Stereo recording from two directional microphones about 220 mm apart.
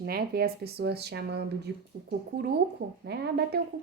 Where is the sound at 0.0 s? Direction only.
45° right (ahead or behind).